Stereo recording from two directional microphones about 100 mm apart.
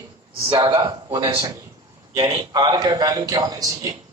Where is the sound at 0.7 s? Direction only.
30° right (ahead or behind).